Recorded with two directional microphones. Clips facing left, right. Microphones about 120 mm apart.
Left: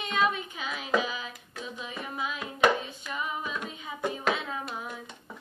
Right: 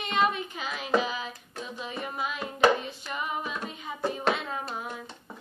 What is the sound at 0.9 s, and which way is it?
Music, 40° right (ahead or behind).